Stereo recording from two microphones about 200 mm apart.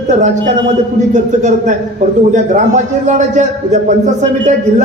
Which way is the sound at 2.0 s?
40° right (ahead or behind).